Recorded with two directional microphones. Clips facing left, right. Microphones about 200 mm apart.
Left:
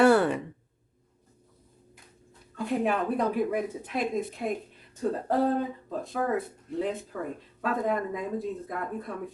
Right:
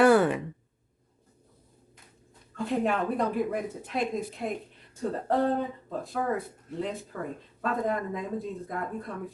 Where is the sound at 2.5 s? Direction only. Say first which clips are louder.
Even; 5° left (ahead or behind).